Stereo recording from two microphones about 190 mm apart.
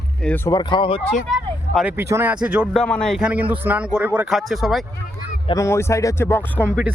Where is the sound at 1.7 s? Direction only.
5° right (ahead or behind).